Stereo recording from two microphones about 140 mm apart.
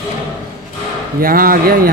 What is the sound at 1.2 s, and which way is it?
Speech, 90° right.